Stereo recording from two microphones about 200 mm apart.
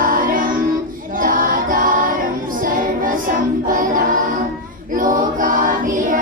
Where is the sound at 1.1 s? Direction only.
45° right (ahead or behind).